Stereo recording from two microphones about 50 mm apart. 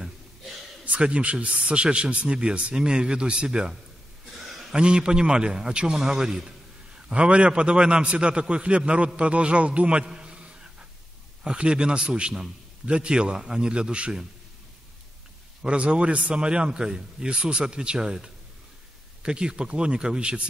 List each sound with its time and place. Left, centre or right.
0.8 s a man's voice: right
4.4 s a sound: centre
4.7 s a man's voice: centre
7.1 s a man's voice: right
15.6 s a man's voice: right